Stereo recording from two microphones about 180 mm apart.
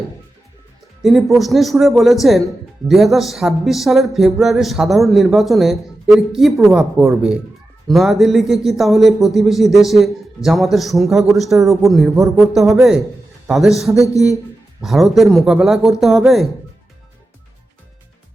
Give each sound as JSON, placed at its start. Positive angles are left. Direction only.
{"t": 1.0, "sound": "music", "side_deg": 0}
{"t": 13.9, "sound": "speech", "side_deg": 15}
{"t": 14.8, "sound": "music", "side_deg": 0}